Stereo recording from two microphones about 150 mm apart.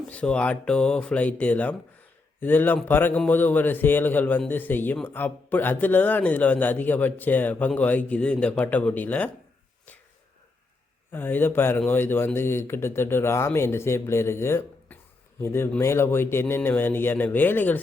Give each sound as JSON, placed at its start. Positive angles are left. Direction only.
{"t": 0.1, "sound": "speech", "side_deg": 5}
{"t": 11.1, "sound": "speech", "side_deg": 15}